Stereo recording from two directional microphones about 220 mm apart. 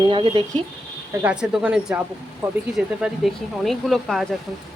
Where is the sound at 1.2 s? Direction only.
5° right (ahead or behind).